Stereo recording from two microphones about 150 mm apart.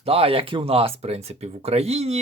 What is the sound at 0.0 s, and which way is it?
Speech, 40° right (ahead or behind).